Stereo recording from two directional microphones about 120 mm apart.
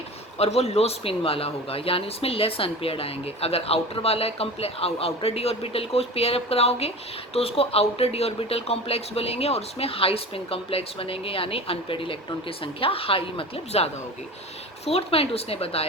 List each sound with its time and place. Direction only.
0.3 s speech: 60° left (ahead or behind)